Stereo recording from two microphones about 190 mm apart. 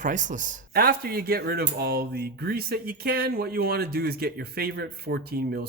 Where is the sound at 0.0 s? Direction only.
40° right (ahead or behind).